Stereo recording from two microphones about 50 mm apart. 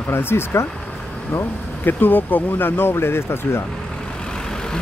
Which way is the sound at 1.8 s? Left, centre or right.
Left.